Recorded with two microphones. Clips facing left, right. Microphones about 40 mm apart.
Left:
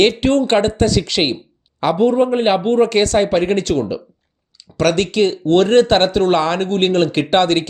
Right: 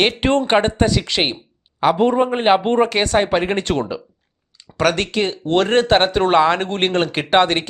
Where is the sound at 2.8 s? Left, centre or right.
Centre.